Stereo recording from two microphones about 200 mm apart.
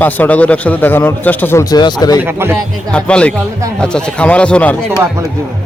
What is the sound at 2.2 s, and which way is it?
Speech, 10° right (ahead or behind).